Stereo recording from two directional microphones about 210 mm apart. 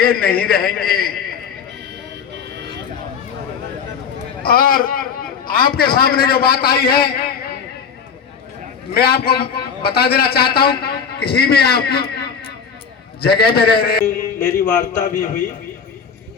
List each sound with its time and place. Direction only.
0.0 s a man's voice: 45° left (ahead or behind)
4.4 s a man's voice: 45° left (ahead or behind)
9.0 s a man's voice: 50° left (ahead or behind)
13.2 s a man's voice: 50° left (ahead or behind)